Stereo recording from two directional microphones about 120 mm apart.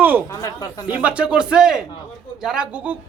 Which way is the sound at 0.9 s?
10° right (ahead or behind).